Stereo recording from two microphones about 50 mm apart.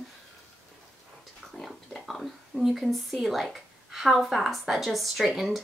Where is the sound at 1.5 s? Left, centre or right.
Centre.